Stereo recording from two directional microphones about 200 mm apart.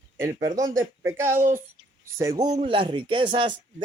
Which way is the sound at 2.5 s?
30° right (ahead or behind).